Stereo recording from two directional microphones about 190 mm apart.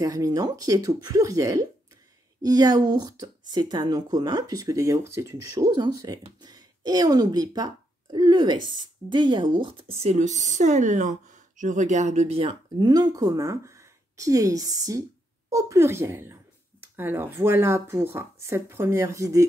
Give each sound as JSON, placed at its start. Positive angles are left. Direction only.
{"t": 0.0, "sound": "speech", "side_deg": -20}